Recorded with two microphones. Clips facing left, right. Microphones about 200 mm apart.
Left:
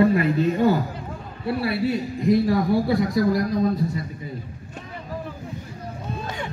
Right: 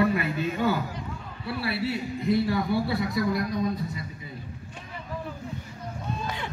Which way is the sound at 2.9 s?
45° left (ahead or behind).